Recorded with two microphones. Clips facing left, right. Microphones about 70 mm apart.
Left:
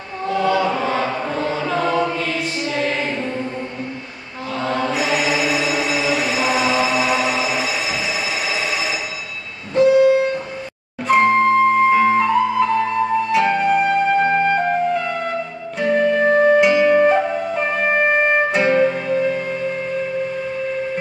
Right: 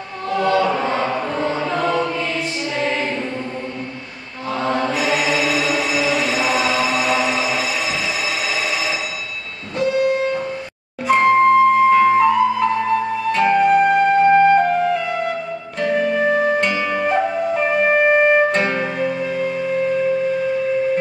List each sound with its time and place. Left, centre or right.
0.3 s choir: centre
0.7 s choir: centre
1.0 s chant: centre
2.7 s music: centre
3.1 s chant: centre
4.6 s mantra: centre
5.0 s chant: centre
6.2 s music: centre
9.8 s music: centre
11.1 s flute: centre
16.5 s music: centre
17.6 s flute: centre
18.8 s music: centre